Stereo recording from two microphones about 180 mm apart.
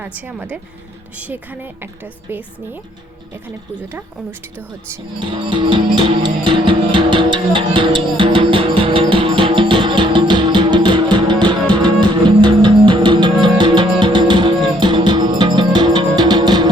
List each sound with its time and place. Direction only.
0.3 s speech: 5° right (ahead or behind)
3.8 s speech: 10° right (ahead or behind)
5.3 s music: 25° right (ahead or behind)